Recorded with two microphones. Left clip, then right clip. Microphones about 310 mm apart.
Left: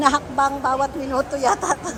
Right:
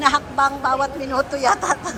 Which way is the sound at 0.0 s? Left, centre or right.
Centre.